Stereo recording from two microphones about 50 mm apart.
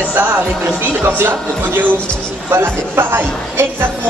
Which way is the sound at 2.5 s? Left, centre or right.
Right.